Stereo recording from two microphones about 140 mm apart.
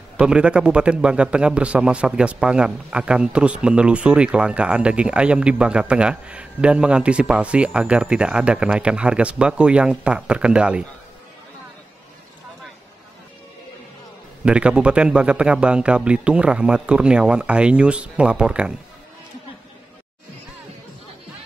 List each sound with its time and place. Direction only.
0.2 s a man's voice: 5° right (ahead or behind)
14.4 s a man's voice: 5° right (ahead or behind)